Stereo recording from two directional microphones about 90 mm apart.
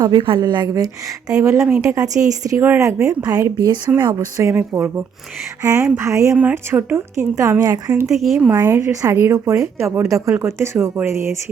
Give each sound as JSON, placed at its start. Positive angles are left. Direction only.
{"t": 0.0, "sound": "a woman's voice", "side_deg": -65}
{"t": 0.8, "sound": "a woman's voice", "side_deg": -40}
{"t": 2.6, "sound": "a woman's voice", "side_deg": -30}
{"t": 4.5, "sound": "a woman's voice", "side_deg": -30}
{"t": 6.3, "sound": "a woman's voice", "side_deg": -20}
{"t": 8.1, "sound": "speech", "side_deg": 0}
{"t": 8.6, "sound": "a woman's voice", "side_deg": -30}